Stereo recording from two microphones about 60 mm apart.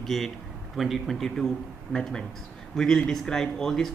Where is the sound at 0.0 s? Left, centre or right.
Centre.